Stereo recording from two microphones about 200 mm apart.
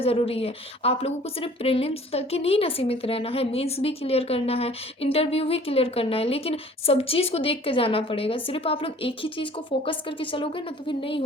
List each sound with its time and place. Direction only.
0.0 s a woman's voice: 30° left (ahead or behind)